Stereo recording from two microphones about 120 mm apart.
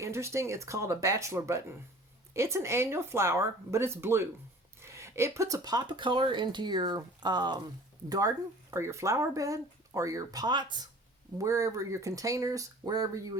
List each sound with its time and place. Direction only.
0.0 s speech: 25° right (ahead or behind)
8.7 s speech: 25° right (ahead or behind); by 10.8 s 40° right (ahead or behind)
11.3 s speech: 25° right (ahead or behind)